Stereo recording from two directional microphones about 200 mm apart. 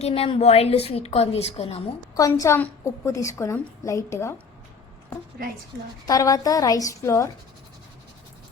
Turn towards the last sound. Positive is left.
turn(degrees=15)  # may be behind; listen again after turning